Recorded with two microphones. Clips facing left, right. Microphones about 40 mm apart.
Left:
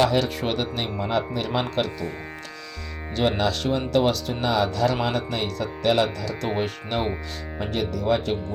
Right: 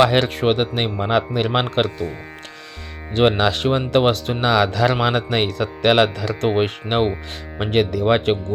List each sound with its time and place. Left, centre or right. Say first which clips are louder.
0.0 s speech: right 5 dB; right
0.4 s speech: right 7 dB; right
0.9 s speech: right 5 dB; right
3.2 s speech: right 6 dB; right
6.5 s speech: right 6 dB; right
7.6 s speech: right 8 dB; right